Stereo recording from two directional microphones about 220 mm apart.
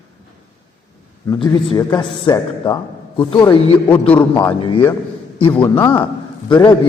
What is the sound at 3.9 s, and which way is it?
Speech, 5° left (ahead or behind).